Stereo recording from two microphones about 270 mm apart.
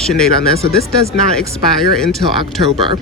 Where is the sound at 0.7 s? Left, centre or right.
Left.